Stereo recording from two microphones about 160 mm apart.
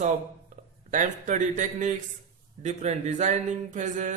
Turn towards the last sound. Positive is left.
turn(degrees=-50)  # may be behind; listen again after turning